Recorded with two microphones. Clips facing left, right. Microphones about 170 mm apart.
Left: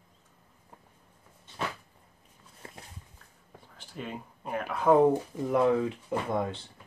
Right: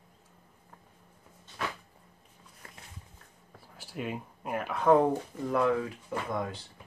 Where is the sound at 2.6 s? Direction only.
25° left (ahead or behind).